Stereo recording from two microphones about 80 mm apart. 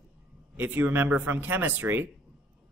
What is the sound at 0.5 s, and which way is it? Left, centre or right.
Speech, right.